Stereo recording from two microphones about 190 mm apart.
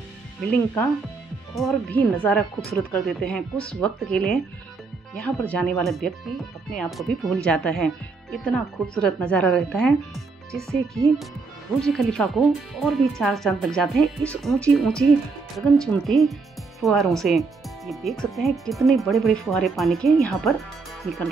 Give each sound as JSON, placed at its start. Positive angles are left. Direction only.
{"t": 1.5, "sound": "speech", "side_deg": 0}
{"t": 10.1, "sound": "speech", "side_deg": -15}
{"t": 11.8, "sound": "speech", "side_deg": 0}